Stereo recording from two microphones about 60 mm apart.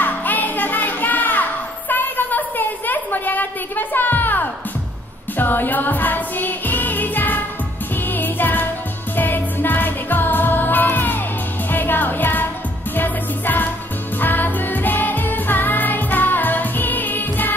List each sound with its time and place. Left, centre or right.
0.0 s music: left